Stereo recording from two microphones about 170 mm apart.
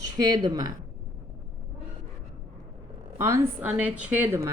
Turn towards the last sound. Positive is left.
turn(degrees=-15)  # may be behind; listen again after turning